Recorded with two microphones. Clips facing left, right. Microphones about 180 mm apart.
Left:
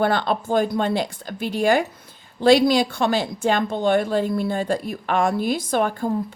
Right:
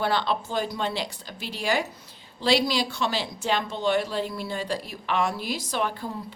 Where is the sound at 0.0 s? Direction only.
50° left (ahead or behind).